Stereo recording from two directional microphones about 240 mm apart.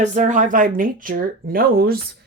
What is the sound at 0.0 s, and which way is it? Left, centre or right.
Speech, right.